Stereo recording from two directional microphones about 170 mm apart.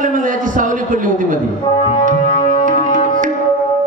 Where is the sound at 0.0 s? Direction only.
50° right (ahead or behind).